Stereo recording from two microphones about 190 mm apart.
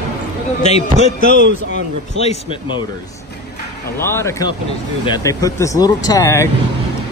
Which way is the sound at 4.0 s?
15° left (ahead or behind).